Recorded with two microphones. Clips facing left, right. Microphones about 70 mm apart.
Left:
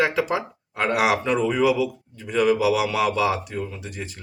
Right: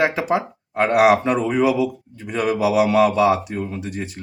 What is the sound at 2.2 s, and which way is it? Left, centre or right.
Speech, centre.